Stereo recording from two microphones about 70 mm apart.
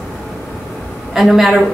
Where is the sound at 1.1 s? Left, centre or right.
Centre.